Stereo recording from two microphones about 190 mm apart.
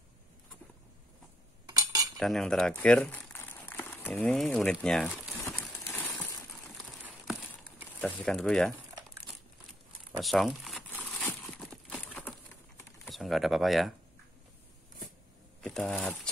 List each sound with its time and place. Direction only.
1.7 s cutlery: 20° right (ahead or behind)
2.1 s speech: centre (ahead or behind)
5.4 s horse: 15° left (ahead or behind)
8.0 s speech: 5° left (ahead or behind)
10.2 s speech: centre (ahead or behind)
10.9 s a sound: 10° left (ahead or behind)
13.0 s speech: centre (ahead or behind)
15.6 s speech: 5° left (ahead or behind)